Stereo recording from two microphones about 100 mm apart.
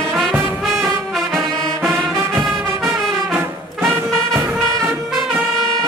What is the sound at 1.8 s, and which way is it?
Music, 30° right (ahead or behind).